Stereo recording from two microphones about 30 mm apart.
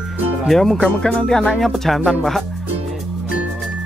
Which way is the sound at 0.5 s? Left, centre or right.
Centre.